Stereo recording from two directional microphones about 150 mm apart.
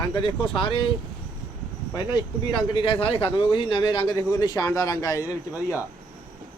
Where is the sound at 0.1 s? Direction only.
35° left (ahead or behind).